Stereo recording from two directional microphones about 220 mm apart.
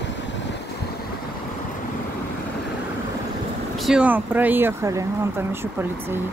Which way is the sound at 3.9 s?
5° right (ahead or behind).